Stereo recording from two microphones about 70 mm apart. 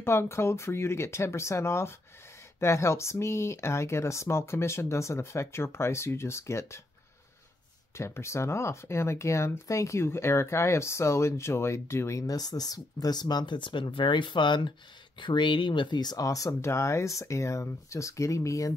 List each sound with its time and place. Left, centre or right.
0.0 s speech: left
7.9 s speech: left